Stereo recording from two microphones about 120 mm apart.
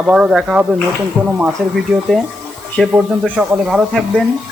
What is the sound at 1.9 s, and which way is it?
Speech, 5° right (ahead or behind).